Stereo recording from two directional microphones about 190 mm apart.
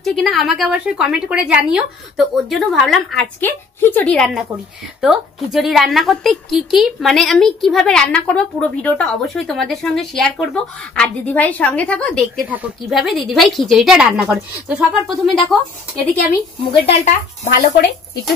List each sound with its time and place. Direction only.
0.0 s a woman's voice: centre (ahead or behind)
16.7 s speech: 35° left (ahead or behind)
17.5 s speech: 50° left (ahead or behind)